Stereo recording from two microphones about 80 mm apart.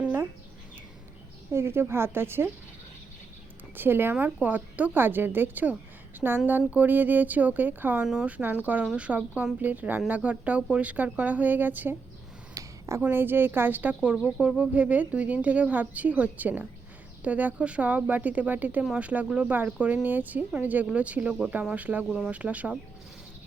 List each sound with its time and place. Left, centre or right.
1.5 s speech: right
3.8 s speech: right
8.0 s speech: centre
12.5 s a sound: right
13.0 s speech: right